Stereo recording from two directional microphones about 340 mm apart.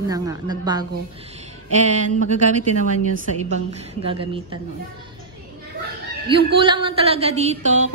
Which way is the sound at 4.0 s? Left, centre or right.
Centre.